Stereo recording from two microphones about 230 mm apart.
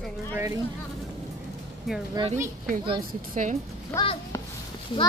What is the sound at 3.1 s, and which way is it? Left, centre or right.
Speech, right.